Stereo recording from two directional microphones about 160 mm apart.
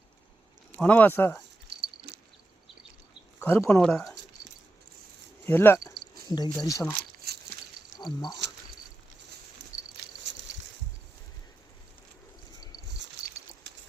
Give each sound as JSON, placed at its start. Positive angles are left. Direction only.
{"t": 0.8, "sound": "speech", "side_deg": 10}
{"t": 1.7, "sound": "a sound", "side_deg": -90}
{"t": 3.4, "sound": "speech", "side_deg": 15}
{"t": 3.8, "sound": "speech", "side_deg": 0}
{"t": 5.5, "sound": "speech", "side_deg": 15}
{"t": 6.3, "sound": "speech", "side_deg": 25}
{"t": 7.3, "sound": "a sound", "side_deg": -80}
{"t": 7.9, "sound": "speech", "side_deg": 25}
{"t": 10.3, "sound": "a sound", "side_deg": -90}